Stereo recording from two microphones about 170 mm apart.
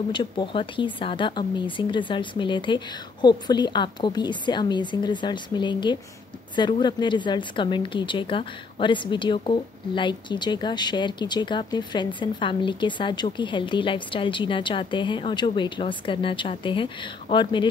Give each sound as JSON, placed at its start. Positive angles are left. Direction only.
{"t": 0.1, "sound": "a woman's voice", "side_deg": 25}